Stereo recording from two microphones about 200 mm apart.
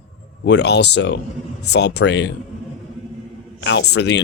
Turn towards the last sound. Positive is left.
turn(degrees=55)  # may be behind; listen again after turning